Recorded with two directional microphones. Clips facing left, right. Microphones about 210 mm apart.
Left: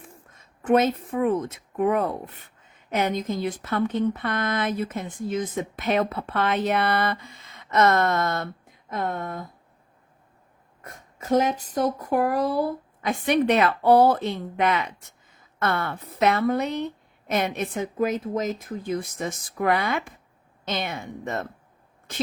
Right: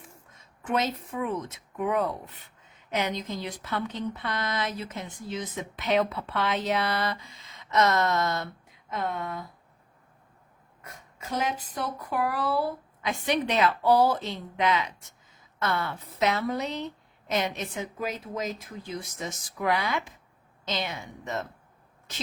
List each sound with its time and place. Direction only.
0.6 s speech: 55° left (ahead or behind)
10.8 s a woman's voice: 50° left (ahead or behind)